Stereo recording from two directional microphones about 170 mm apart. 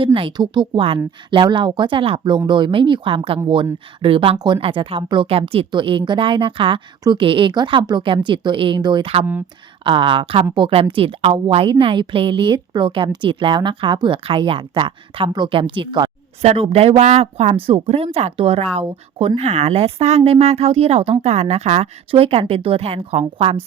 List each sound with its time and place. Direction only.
0.0 s a woman's voice: 30° right (ahead or behind)